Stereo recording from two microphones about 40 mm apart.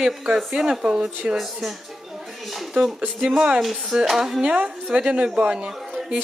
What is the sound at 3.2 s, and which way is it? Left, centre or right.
Speech, centre.